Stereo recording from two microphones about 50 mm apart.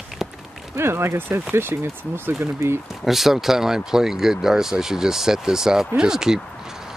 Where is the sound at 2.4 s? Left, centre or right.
Right.